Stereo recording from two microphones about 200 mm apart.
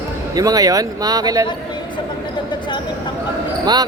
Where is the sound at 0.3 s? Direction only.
20° right (ahead or behind).